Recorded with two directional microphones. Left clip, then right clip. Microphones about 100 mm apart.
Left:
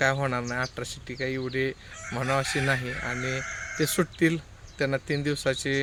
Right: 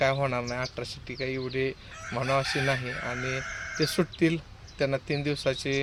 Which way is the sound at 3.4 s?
5° left (ahead or behind).